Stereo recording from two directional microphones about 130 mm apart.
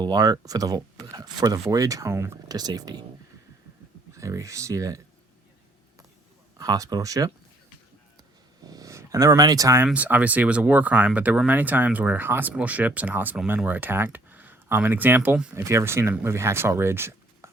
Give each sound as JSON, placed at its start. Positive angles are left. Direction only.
{"t": 0.0, "sound": "speech", "side_deg": -30}
{"t": 4.1, "sound": "speech", "side_deg": -25}
{"t": 6.6, "sound": "speech", "side_deg": -25}
{"t": 8.6, "sound": "speech", "side_deg": -30}
{"t": 9.8, "sound": "speech", "side_deg": -10}